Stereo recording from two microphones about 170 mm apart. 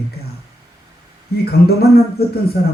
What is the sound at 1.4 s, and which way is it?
Speech, 65° left (ahead or behind).